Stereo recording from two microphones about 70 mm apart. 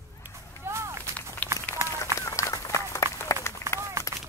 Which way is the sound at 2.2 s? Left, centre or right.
Left.